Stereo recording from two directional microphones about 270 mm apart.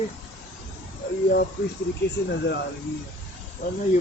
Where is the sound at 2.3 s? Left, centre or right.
Left.